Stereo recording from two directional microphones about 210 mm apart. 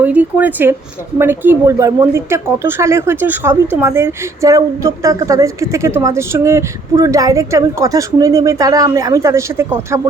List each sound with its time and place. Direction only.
0.0 s a woman's voice: 5° right (ahead or behind)